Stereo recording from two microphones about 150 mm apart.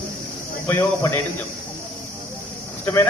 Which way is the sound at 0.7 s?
15° left (ahead or behind).